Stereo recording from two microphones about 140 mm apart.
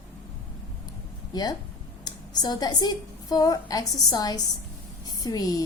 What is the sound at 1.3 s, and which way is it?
A woman's voice, 25° left (ahead or behind).